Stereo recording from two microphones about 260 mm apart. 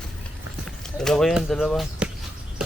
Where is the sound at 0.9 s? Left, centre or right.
Centre.